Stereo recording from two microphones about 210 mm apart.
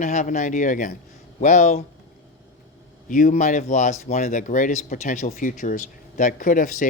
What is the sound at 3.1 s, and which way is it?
Speech, 35° left (ahead or behind).